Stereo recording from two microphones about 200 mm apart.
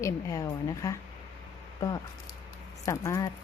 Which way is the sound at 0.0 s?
15° left (ahead or behind).